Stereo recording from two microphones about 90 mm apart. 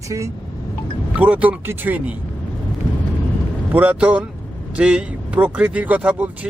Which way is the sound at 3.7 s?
20° right (ahead or behind).